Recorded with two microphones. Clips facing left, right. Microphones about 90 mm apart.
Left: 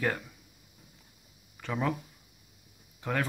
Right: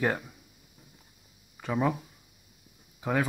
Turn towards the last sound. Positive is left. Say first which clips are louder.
# right 3 dB
turn(degrees=-10)  # may be behind; listen again after turning